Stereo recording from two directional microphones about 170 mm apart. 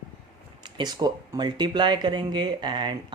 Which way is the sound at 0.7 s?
25° right (ahead or behind).